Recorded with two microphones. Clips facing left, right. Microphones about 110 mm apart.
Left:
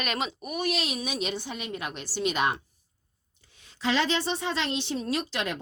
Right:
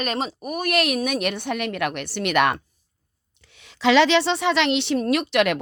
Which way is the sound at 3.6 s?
90° right.